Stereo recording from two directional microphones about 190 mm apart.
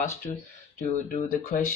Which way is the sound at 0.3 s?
25° left (ahead or behind).